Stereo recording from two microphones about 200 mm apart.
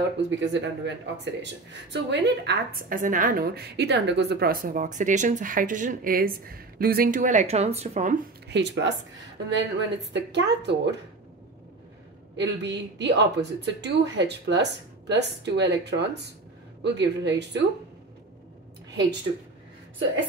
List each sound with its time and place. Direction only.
0.4 s speech: 60° right (ahead or behind); by 8.2 s 35° right (ahead or behind)
8.5 s a woman's voice: 60° right (ahead or behind)
12.4 s a woman's voice: 60° right (ahead or behind)